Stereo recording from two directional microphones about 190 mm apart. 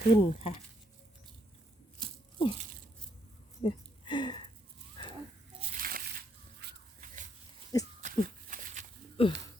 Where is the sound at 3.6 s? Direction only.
25° left (ahead or behind).